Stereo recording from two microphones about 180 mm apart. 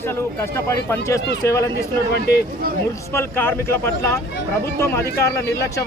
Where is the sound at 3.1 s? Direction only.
15° left (ahead or behind).